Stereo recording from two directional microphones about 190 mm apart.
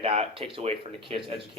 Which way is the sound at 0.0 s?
30° right (ahead or behind).